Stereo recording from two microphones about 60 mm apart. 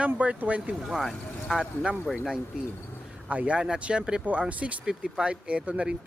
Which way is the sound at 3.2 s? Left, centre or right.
Centre.